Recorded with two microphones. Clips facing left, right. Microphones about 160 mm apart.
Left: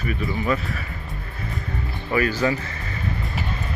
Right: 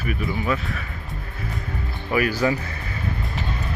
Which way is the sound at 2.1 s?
10° right (ahead or behind).